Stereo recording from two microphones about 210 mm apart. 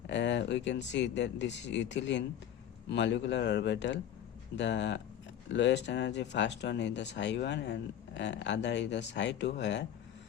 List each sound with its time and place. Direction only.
0.1 s speech: 60° left (ahead or behind)